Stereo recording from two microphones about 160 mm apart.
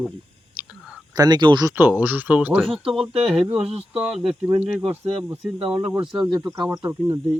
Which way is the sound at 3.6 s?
40° right (ahead or behind).